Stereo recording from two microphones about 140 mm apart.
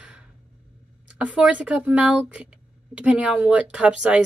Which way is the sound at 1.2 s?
10° right (ahead or behind).